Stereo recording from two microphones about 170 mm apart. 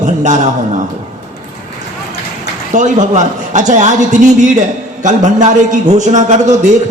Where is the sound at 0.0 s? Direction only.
45° right (ahead or behind).